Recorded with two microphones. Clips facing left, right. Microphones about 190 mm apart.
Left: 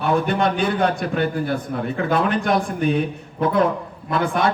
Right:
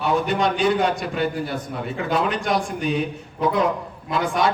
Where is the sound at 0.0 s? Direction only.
55° left (ahead or behind).